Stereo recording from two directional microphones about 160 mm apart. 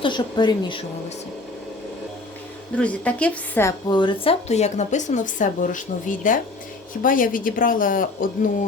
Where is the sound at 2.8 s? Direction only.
10° left (ahead or behind).